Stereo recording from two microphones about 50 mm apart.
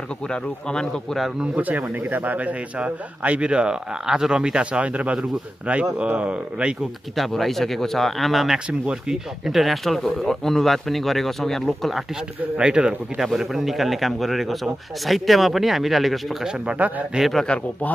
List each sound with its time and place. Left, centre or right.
0.3 s speech: centre
1.4 s a man's voice: right
7.2 s speech: centre
8.6 s a man's voice: right
9.1 s speech: centre
12.5 s a man's voice: centre
13.2 s speech: centre
16.6 s a man's voice: right
17.5 s speech: left